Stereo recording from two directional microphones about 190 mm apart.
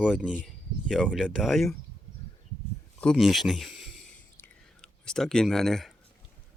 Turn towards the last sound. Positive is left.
turn(degrees=0)  # may be behind; listen again after turning